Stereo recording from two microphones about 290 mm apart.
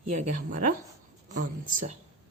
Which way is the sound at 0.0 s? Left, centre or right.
Right.